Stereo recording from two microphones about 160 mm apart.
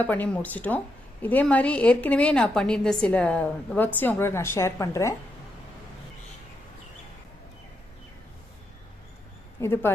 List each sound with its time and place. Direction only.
0.0 s a woman's voice: 10° left (ahead or behind)
9.6 s a woman's voice: 15° left (ahead or behind)